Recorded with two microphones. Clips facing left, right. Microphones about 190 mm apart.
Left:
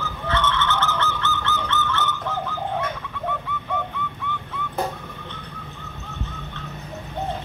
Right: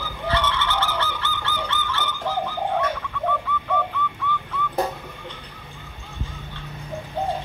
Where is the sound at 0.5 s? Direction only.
10° right (ahead or behind).